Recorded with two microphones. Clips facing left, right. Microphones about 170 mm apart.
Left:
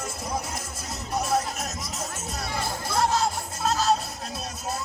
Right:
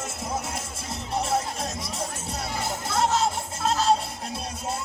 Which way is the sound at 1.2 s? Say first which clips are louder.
Left 2 dB; 30° right (ahead or behind).